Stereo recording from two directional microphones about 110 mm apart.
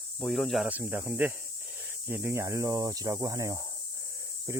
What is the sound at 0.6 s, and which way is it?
Speech, 15° right (ahead or behind).